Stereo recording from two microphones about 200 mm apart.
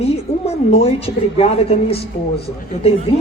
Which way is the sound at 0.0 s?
30° left (ahead or behind).